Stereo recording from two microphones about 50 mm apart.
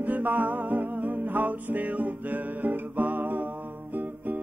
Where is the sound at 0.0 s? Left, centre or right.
Right.